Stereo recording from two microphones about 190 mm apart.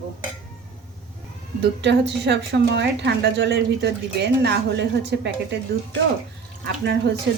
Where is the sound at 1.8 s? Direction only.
65° right (ahead or behind).